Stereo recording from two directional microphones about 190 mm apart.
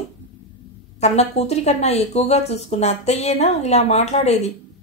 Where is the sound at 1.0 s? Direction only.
35° left (ahead or behind).